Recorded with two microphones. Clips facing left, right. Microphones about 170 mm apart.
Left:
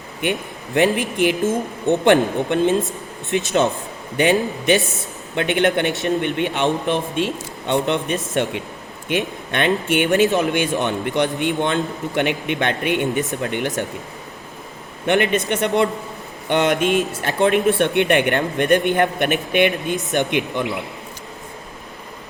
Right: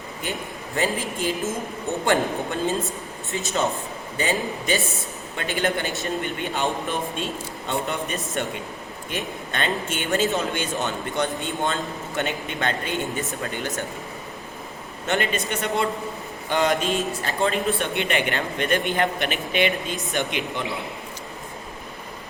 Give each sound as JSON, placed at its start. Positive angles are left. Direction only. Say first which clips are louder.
{"t": 0.2, "sound": "speech", "louder": "left 8 dB", "side_deg": 70}
{"t": 9.0, "sound": "a man's voice", "louder": "left 8 dB", "side_deg": 65}
{"t": 15.0, "sound": "a man's voice", "louder": "left 7 dB", "side_deg": 60}